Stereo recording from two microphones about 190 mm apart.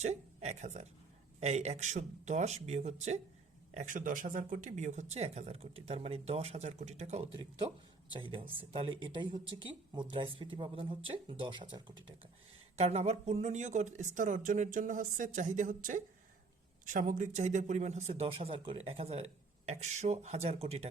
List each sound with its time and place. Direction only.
0.0 s speech: 35° right (ahead or behind)